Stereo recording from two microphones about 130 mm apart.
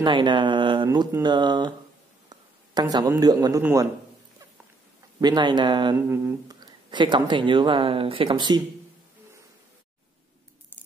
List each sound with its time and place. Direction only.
0.0 s speech: 40° right (ahead or behind)
2.2 s a sound: 30° right (ahead or behind)
3.2 s a man's voice: 30° right (ahead or behind)
5.2 s speech: 35° right (ahead or behind)
5.9 s humming: 20° right (ahead or behind)
6.5 s speech: 35° right (ahead or behind)